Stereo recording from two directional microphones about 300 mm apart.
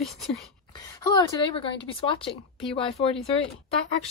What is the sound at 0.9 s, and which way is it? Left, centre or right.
Speech, centre.